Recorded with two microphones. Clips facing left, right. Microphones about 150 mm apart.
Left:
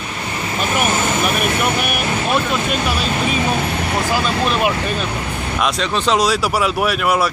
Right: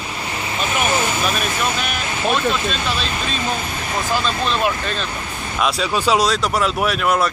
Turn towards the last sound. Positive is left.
turn(degrees=0)  # may be behind; listen again after turning